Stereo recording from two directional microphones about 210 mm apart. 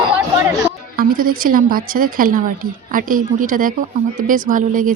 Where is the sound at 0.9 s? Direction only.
40° right (ahead or behind).